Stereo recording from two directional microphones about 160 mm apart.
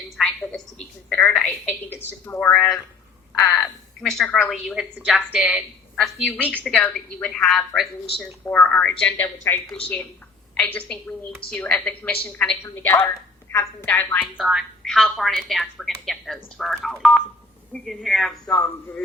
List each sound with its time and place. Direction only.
0.2 s a woman's voice: centre (ahead or behind)
9.2 s a woman's voice: 20° left (ahead or behind)
14.3 s a woman's voice: centre (ahead or behind)